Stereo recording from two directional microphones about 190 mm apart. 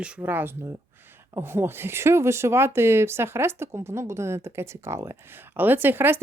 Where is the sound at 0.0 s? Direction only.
5° right (ahead or behind).